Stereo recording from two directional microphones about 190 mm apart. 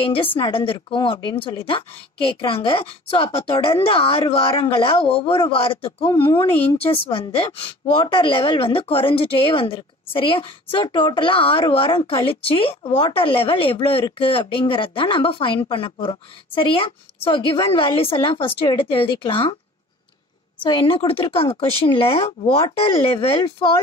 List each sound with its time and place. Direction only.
0.0 s a woman's voice: 30° left (ahead or behind)
20.6 s a woman's voice: 25° left (ahead or behind)